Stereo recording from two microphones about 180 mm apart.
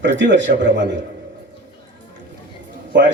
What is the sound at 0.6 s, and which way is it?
Speech, 80° right.